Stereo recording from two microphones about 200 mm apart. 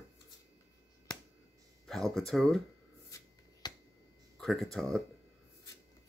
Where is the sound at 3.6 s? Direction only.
20° left (ahead or behind).